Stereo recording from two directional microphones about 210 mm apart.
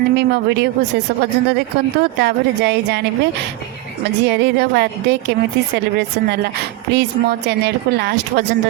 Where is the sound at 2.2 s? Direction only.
55° right (ahead or behind).